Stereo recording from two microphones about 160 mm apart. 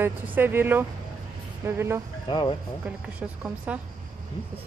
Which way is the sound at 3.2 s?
10° right (ahead or behind).